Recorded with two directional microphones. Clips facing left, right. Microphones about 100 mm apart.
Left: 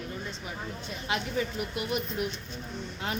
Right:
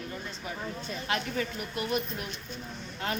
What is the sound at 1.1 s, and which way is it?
Speech, 15° left (ahead or behind).